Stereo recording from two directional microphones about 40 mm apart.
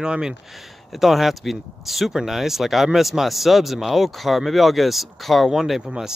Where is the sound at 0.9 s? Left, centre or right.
Centre.